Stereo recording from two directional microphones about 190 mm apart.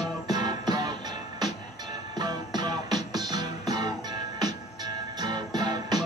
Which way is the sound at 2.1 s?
20° right (ahead or behind).